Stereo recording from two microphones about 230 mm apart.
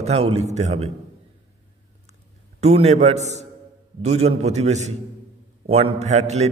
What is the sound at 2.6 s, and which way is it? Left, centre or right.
A man's voice, right.